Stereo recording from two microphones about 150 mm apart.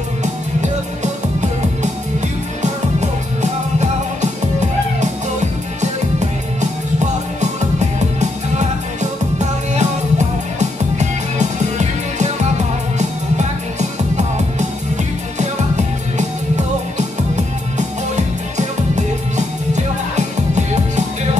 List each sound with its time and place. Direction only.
0.2 s music: 50° right (ahead or behind)
5.0 s music: 50° right (ahead or behind)
17.7 s music: 50° right (ahead or behind)